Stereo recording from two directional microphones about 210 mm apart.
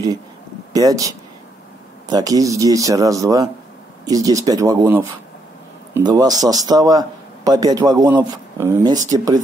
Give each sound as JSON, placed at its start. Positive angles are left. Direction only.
{"t": 0.7, "sound": "a man's voice", "side_deg": -15}